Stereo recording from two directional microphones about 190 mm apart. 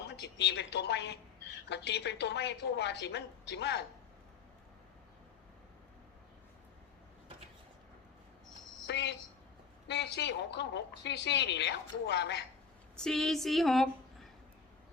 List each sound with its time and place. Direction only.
0.0 s a woman's voice: 65° left (ahead or behind)
8.9 s a woman's voice: 65° left (ahead or behind)
13.0 s a sound: 5° left (ahead or behind)